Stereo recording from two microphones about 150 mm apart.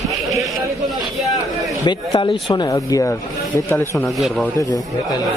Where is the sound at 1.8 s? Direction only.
30° left (ahead or behind).